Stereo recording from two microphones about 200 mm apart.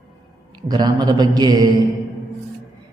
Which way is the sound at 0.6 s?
20° right (ahead or behind).